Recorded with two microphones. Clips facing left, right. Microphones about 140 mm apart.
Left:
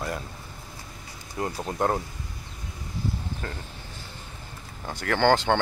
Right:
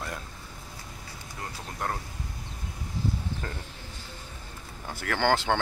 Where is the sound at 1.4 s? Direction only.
25° left (ahead or behind).